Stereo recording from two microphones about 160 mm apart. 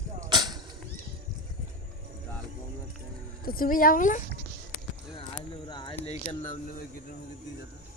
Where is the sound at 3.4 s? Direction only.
65° left (ahead or behind).